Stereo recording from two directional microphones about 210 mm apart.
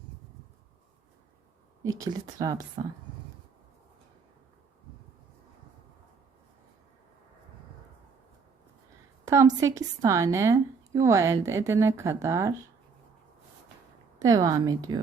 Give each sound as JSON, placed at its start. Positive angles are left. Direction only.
{"t": 1.8, "sound": "a woman's voice", "side_deg": -15}
{"t": 9.2, "sound": "a woman's voice", "side_deg": -15}
{"t": 14.2, "sound": "a woman's voice", "side_deg": -15}